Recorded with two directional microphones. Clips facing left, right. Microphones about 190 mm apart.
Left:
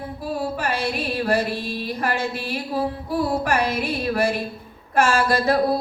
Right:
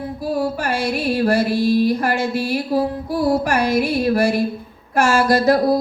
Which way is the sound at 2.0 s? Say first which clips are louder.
Right 5 dB; 40° right (ahead or behind).